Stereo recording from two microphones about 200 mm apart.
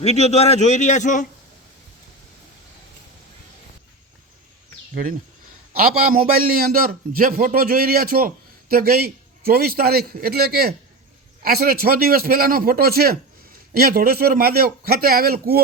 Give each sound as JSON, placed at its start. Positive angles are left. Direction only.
{"t": 0.0, "sound": "a man's voice", "side_deg": 35}
{"t": 6.0, "sound": "speech", "side_deg": -45}